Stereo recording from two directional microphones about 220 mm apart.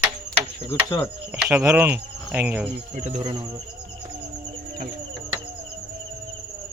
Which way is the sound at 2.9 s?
30° right (ahead or behind).